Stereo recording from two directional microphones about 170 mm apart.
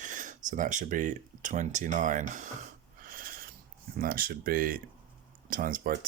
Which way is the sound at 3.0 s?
55° right (ahead or behind).